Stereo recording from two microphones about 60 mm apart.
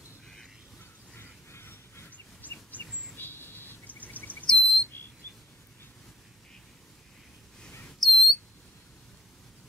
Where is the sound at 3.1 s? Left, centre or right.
Left.